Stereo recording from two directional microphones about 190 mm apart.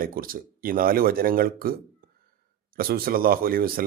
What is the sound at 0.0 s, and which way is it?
Speech, 50° right (ahead or behind).